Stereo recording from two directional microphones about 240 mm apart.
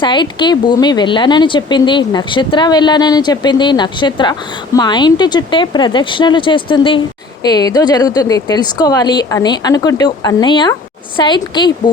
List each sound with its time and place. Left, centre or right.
0.0 s a woman's voice: centre